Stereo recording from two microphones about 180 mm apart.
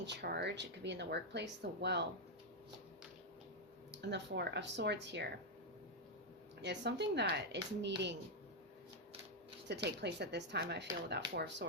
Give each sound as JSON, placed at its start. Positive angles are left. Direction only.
{"t": 0.0, "sound": "speech", "side_deg": -65}
{"t": 4.0, "sound": "speech", "side_deg": -70}
{"t": 6.6, "sound": "speech", "side_deg": -75}
{"t": 9.6, "sound": "speech", "side_deg": -70}